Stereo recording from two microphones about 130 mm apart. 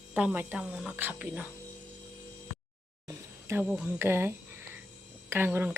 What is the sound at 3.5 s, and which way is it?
Speech, 5° right (ahead or behind).